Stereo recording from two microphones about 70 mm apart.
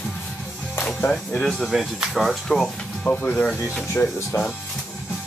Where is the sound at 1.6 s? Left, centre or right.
Centre.